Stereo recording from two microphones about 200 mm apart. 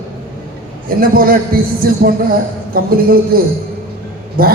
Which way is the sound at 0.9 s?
45° right (ahead or behind).